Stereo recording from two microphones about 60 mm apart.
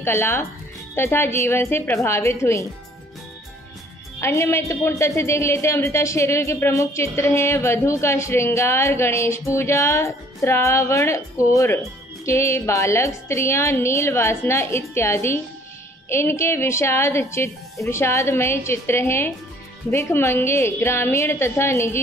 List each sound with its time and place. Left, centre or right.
0.0 s speech: left
4.2 s speech: left